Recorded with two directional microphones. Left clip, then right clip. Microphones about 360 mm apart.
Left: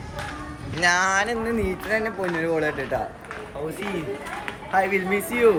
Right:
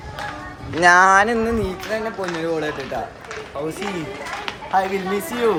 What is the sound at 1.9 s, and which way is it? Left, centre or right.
Speech, centre.